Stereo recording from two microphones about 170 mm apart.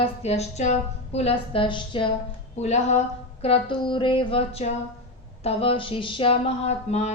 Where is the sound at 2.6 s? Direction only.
40° left (ahead or behind).